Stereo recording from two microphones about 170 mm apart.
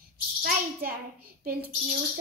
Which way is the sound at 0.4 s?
60° right (ahead or behind).